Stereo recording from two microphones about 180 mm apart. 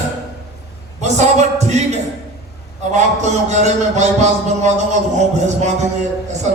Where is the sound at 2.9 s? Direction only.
40° right (ahead or behind).